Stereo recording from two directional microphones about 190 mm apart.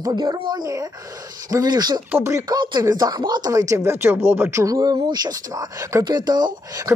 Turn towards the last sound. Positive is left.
turn(degrees=-20)  # may be behind; listen again after turning